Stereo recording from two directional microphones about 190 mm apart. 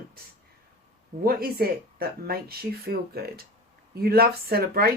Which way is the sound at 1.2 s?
50° right (ahead or behind).